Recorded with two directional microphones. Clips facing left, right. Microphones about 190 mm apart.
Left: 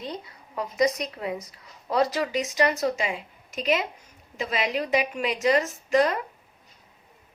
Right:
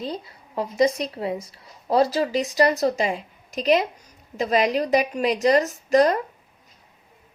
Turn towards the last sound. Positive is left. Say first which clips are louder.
# right 4 dB
turn(degrees=-40)  # may be behind; listen again after turning